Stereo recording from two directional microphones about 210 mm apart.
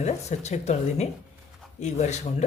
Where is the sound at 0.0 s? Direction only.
35° left (ahead or behind).